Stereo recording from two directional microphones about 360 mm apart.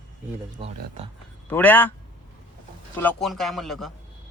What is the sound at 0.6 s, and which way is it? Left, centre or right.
Speech, centre.